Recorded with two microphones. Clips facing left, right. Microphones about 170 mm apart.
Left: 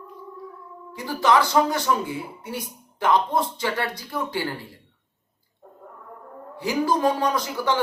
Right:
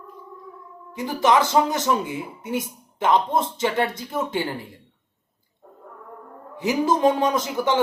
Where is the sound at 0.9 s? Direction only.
20° right (ahead or behind).